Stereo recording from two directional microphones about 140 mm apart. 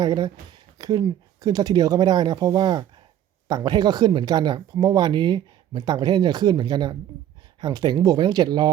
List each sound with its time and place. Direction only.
0.0 s speech: 30° right (ahead or behind)